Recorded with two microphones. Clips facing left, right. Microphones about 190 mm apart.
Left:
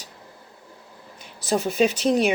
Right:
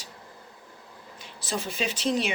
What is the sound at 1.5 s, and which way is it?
Speech, 45° left (ahead or behind).